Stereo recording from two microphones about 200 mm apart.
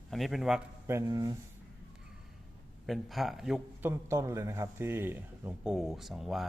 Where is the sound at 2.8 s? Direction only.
Centre (ahead or behind).